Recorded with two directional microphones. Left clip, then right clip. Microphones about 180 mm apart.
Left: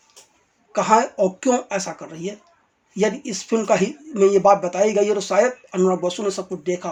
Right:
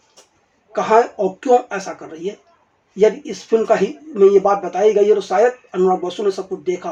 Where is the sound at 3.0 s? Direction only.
30° left (ahead or behind).